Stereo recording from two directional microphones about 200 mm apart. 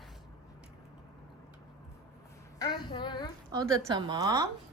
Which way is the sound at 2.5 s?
20° left (ahead or behind).